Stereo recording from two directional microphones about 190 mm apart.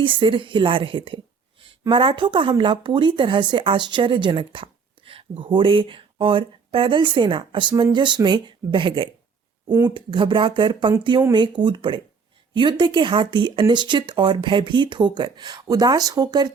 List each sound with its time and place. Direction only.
0.0 s speech: 25° right (ahead or behind)
9.6 s speech: 15° right (ahead or behind)
9.9 s speech: 25° right (ahead or behind)